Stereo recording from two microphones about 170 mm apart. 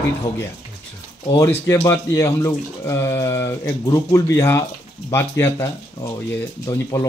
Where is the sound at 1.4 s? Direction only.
15° left (ahead or behind).